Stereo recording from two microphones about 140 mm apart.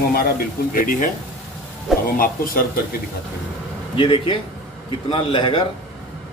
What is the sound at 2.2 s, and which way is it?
Speech, 90° left.